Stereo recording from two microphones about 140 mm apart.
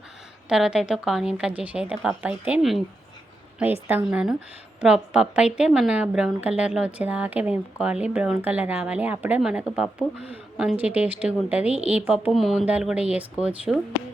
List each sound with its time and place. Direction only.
0.4 s a woman's voice: 5° right (ahead or behind)
3.6 s a woman's voice: 15° right (ahead or behind)